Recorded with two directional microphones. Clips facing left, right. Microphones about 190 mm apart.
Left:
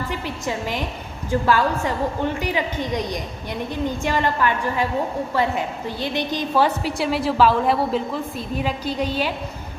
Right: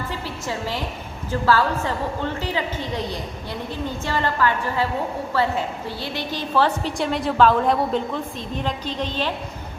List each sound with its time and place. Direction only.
0.1 s a woman's voice: 15° left (ahead or behind)